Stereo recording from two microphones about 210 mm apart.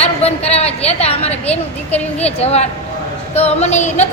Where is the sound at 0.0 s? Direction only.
30° left (ahead or behind).